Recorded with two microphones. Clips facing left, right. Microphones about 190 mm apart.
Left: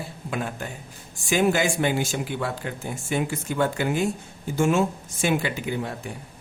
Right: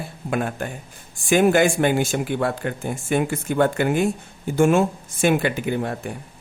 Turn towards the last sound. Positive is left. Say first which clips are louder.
# right 5 dB
turn(degrees=-55)  # may be behind; listen again after turning